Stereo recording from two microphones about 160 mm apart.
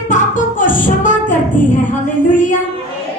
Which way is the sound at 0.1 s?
55° left (ahead or behind).